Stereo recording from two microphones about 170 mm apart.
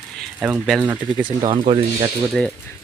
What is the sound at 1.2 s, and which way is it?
Speech, 25° right (ahead or behind).